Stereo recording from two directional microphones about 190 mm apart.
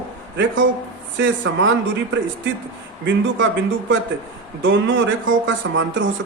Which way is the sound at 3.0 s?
80° right.